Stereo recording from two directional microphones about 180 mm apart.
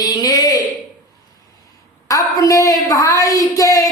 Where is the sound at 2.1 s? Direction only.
20° left (ahead or behind).